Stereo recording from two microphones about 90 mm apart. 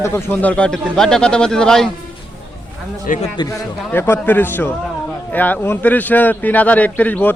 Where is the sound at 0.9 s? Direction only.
5° left (ahead or behind).